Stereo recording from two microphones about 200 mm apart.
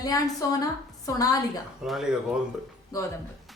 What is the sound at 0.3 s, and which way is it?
A woman's voice, 15° left (ahead or behind).